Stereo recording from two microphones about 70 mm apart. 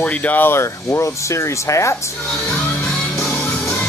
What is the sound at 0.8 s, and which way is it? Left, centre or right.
Speech, left.